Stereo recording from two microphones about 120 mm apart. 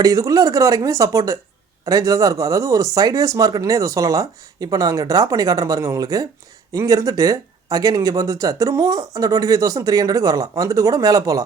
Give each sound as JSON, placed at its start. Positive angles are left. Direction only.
{"t": 0.0, "sound": "speech", "side_deg": -30}